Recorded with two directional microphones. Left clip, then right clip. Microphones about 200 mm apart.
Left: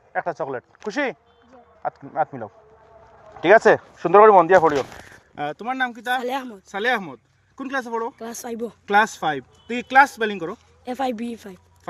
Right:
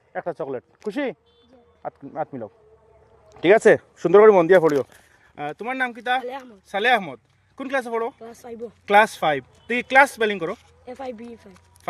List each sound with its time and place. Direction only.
0.1 s speech: 35° right (ahead or behind)
3.4 s speech: 50° right (ahead or behind)
5.3 s speech: 15° left (ahead or behind)
5.5 s speech: 10° right (ahead or behind)
6.2 s speech: 55° left (ahead or behind)
6.7 s speech: 20° right (ahead or behind)
8.2 s speech: 60° left (ahead or behind)
8.9 s speech: 25° right (ahead or behind)
10.8 s speech: 65° left (ahead or behind)